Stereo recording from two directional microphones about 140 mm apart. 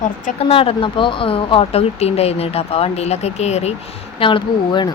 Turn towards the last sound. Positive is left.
turn(degrees=30)  # may be behind; listen again after turning